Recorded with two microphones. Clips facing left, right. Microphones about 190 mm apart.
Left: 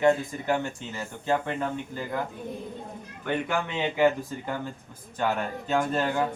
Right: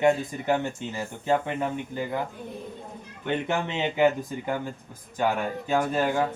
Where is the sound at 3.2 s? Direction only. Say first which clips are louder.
Right 1 dB; 20° right (ahead or behind).